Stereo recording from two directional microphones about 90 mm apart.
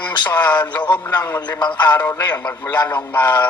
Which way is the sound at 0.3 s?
20° left (ahead or behind).